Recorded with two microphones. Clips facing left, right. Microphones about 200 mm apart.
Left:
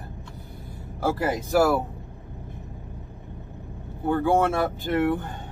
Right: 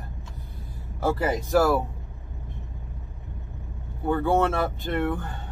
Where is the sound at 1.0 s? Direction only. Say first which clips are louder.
Even; centre (ahead or behind).